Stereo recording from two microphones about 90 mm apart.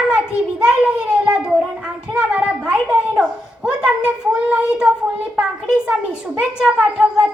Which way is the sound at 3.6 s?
10° right (ahead or behind).